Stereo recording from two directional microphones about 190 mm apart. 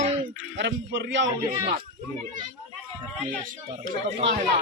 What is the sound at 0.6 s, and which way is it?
Speech, 75° right (ahead or behind).